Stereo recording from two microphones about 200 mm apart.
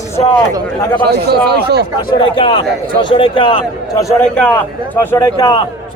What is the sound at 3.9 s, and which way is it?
A man's voice, 15° left (ahead or behind).